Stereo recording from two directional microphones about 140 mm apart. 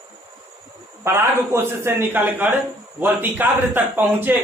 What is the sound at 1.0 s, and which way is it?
A man's voice, 20° right (ahead or behind).